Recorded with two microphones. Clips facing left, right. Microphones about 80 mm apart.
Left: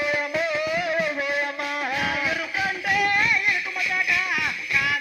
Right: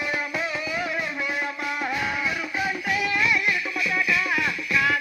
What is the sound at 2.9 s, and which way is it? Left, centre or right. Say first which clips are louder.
Music: left 5 dB; left.